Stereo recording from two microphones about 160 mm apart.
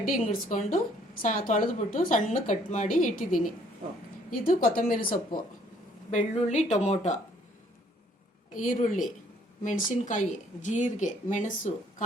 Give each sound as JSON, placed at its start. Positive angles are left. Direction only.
{"t": 0.0, "sound": "a woman's voice", "side_deg": 60}
{"t": 4.3, "sound": "a woman's voice", "side_deg": 65}
{"t": 6.1, "sound": "speech", "side_deg": 45}
{"t": 8.5, "sound": "speech", "side_deg": 55}